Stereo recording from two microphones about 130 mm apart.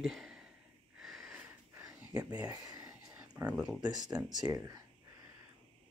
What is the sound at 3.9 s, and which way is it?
Speech, 30° right (ahead or behind).